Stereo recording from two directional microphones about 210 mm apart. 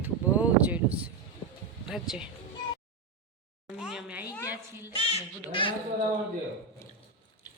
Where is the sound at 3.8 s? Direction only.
5° right (ahead or behind).